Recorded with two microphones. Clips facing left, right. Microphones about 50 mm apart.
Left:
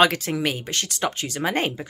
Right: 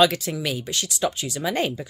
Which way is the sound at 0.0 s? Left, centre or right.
Left.